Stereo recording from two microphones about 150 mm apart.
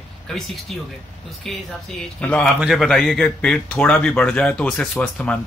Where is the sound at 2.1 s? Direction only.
10° left (ahead or behind).